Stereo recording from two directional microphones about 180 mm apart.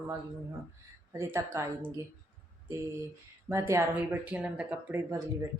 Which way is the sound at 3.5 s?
15° right (ahead or behind).